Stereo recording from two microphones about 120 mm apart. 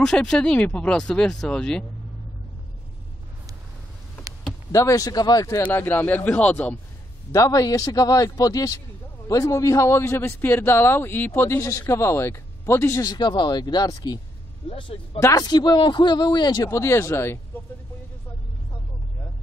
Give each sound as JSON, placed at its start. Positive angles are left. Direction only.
{"t": 0.0, "sound": "speech", "side_deg": 5}
{"t": 4.7, "sound": "a man's voice", "side_deg": 30}
{"t": 5.7, "sound": "speech", "side_deg": 15}
{"t": 7.3, "sound": "a man's voice", "side_deg": 30}
{"t": 13.1, "sound": "a man's voice", "side_deg": 35}
{"t": 14.7, "sound": "speech", "side_deg": 45}
{"t": 15.1, "sound": "a man's voice", "side_deg": 25}
{"t": 15.4, "sound": "a man's voice", "side_deg": 35}